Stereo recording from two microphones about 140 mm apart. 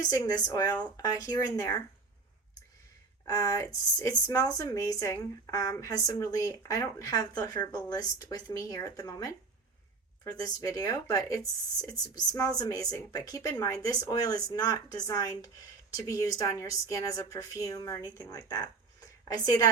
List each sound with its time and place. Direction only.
0.1 s speech: 25° left (ahead or behind)
3.2 s speech: 25° left (ahead or behind)
10.3 s a woman's voice: 25° left (ahead or behind)